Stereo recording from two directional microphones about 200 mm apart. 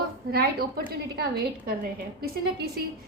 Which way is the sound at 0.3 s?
50° right (ahead or behind).